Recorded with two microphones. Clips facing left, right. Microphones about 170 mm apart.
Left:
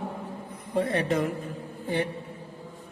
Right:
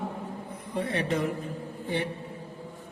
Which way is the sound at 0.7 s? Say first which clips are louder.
Left 4 dB; 45° left (ahead or behind).